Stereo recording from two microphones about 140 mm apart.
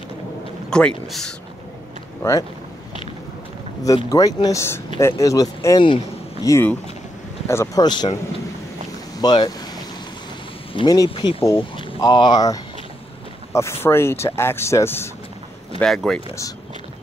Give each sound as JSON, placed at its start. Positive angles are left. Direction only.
{"t": 0.7, "sound": "speech", "side_deg": 5}
{"t": 3.8, "sound": "speech", "side_deg": 25}
{"t": 7.8, "sound": "speech", "side_deg": 30}
{"t": 9.2, "sound": "speech", "side_deg": 30}
{"t": 10.7, "sound": "speech", "side_deg": 30}
{"t": 15.8, "sound": "speech", "side_deg": 5}